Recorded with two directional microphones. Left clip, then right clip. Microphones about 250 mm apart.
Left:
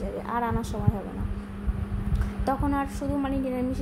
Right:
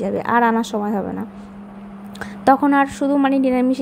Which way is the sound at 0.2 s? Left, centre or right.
Right.